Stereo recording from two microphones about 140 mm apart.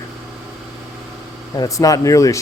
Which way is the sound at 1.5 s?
25° left (ahead or behind).